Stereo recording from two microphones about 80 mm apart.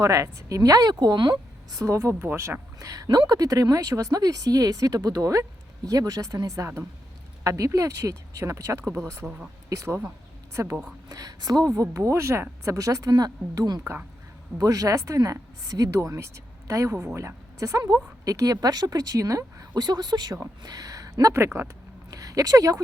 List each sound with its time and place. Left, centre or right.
0.0 s speech: right
1.8 s speech: right
11.1 s speech: right
11.7 s a woman's voice: right
19.8 s speech: right
21.3 s speech: right
22.1 s speech: right